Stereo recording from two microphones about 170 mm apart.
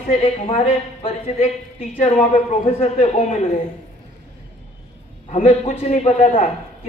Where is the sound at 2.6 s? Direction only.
40° left (ahead or behind).